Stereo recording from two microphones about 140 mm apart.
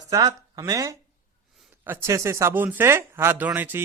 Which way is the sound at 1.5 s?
10° right (ahead or behind).